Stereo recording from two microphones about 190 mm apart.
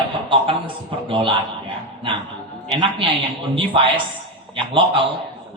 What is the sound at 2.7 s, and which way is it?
Speech, 25° right (ahead or behind).